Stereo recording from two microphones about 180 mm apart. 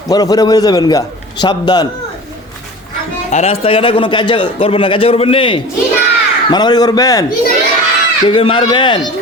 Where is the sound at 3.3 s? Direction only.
35° left (ahead or behind).